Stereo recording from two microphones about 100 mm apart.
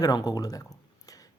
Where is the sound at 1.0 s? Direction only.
35° left (ahead or behind).